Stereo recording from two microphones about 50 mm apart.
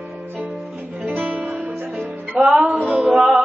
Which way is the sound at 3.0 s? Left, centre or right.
Centre.